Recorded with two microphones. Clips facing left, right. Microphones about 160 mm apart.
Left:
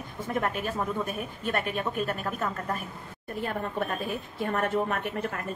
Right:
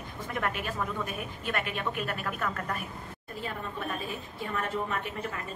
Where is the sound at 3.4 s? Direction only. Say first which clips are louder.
Left 6 dB; 55° left (ahead or behind).